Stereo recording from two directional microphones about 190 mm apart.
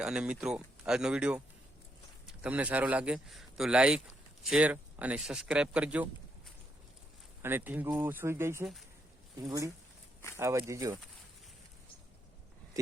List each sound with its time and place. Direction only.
0.0 s speech: 5° right (ahead or behind)
2.4 s speech: 5° right (ahead or behind)
12.8 s a sound: 15° right (ahead or behind)